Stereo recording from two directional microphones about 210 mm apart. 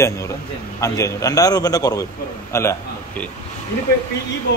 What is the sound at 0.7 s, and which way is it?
A man's voice, 15° left (ahead or behind).